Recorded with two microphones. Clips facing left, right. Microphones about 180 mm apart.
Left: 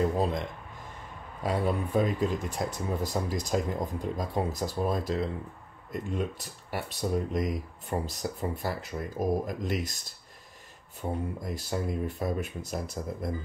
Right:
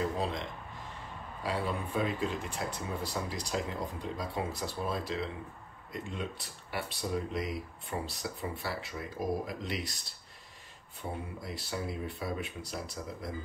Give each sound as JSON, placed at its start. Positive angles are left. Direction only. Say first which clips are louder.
{"t": 0.2, "sound": "speech", "louder": "left 6 dB", "side_deg": 50}